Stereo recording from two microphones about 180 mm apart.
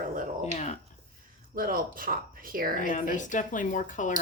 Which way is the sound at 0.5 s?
40° left (ahead or behind).